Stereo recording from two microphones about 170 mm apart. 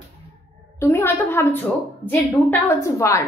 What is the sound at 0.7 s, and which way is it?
A woman's voice, 15° left (ahead or behind).